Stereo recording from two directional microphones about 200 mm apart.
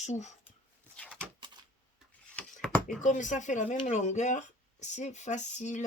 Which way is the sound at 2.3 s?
5° left (ahead or behind).